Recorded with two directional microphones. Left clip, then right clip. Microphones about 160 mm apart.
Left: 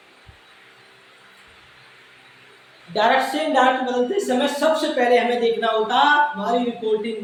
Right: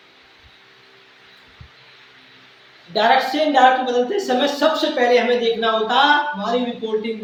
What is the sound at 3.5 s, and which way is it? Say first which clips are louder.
A woman's voice: right 4 dB; 25° right (ahead or behind).